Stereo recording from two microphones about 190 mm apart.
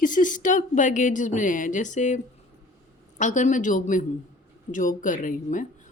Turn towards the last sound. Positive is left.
turn(degrees=45)  # may be behind; listen again after turning